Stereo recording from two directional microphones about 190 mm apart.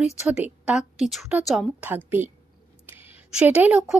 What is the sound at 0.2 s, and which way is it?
A woman's voice, 5° right (ahead or behind).